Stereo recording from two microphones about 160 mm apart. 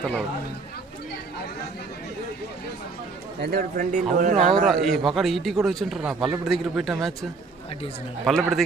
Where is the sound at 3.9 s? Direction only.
50° right (ahead or behind).